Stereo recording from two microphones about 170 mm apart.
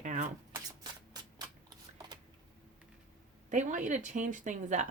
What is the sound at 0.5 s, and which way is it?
Shuffling cards, 25° right (ahead or behind).